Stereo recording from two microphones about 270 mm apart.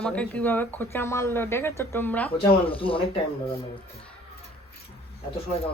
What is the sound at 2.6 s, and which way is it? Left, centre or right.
Speech, centre.